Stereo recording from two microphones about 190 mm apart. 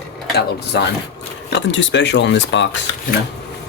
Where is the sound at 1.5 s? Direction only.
70° left (ahead or behind).